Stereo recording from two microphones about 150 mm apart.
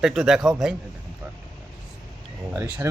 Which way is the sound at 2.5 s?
15° right (ahead or behind).